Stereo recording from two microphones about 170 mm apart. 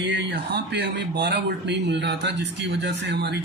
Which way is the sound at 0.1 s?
90° right.